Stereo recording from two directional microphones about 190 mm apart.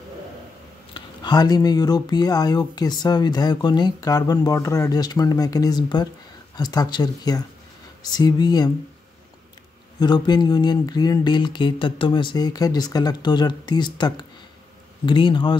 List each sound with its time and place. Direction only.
0.9 s speech: 20° left (ahead or behind)
9.9 s speech: 25° left (ahead or behind)